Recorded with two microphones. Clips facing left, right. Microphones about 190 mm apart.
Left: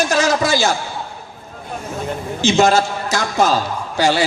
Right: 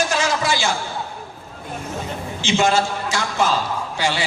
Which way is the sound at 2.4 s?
40° left (ahead or behind).